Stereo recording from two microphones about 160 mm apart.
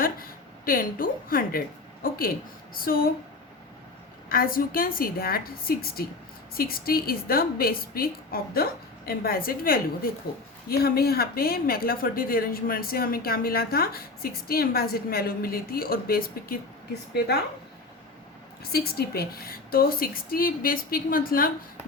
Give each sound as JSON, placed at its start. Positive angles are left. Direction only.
{"t": 0.0, "sound": "a sound", "side_deg": 65}
{"t": 2.8, "sound": "speech", "side_deg": 65}
{"t": 4.3, "sound": "a woman's voice", "side_deg": 65}
{"t": 18.7, "sound": "speech", "side_deg": 75}